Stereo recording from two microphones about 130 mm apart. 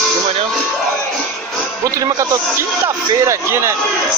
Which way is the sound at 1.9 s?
25° right (ahead or behind).